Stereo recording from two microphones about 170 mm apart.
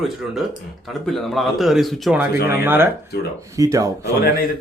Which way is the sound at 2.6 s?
15° right (ahead or behind).